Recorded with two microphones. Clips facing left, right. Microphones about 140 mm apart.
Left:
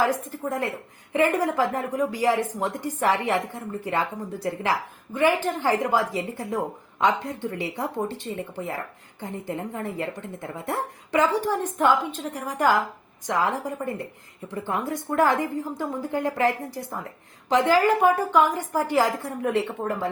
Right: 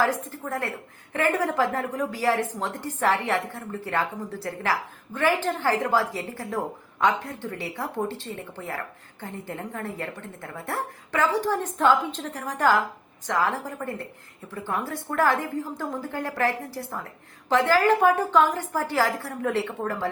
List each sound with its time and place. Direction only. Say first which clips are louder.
0.0 s a woman's voice: left 1 dB; 15° left (ahead or behind)